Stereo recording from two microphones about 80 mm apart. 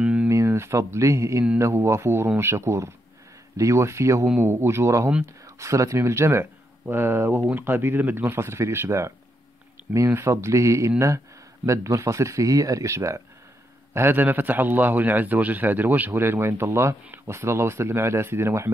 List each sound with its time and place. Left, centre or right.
0.0 s a sound: centre
0.3 s a man's voice: right
13.9 s a man's voice: right